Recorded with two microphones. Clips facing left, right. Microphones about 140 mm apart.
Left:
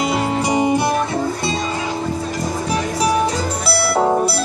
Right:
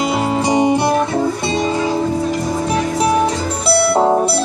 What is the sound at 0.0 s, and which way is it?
Music, 25° right (ahead or behind).